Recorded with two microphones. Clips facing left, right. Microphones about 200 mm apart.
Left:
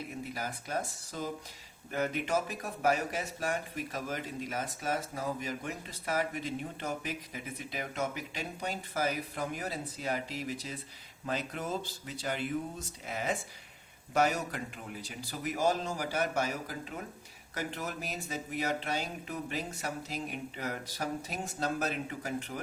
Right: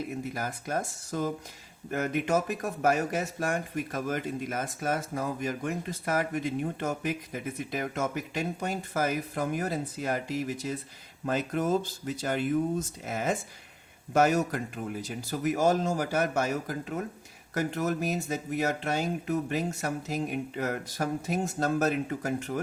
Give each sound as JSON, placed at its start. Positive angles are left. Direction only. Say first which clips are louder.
{"t": 0.3, "sound": "speech", "louder": "right 2 dB", "side_deg": -50}